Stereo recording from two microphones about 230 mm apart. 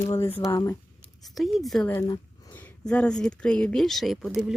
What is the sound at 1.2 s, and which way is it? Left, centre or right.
Speech, centre.